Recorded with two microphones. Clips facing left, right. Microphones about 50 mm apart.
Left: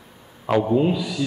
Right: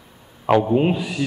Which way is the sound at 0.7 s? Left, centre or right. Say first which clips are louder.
Right 1 dB; right.